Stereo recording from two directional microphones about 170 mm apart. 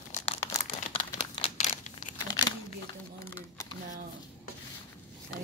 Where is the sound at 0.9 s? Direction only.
30° left (ahead or behind).